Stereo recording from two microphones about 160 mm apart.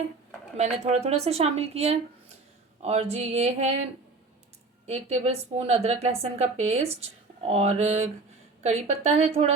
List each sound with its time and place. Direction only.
0.5 s a woman's voice: 45° right (ahead or behind)
4.9 s a woman's voice: 40° right (ahead or behind)